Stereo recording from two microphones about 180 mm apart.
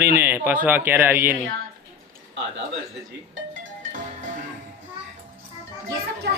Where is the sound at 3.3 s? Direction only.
90° right.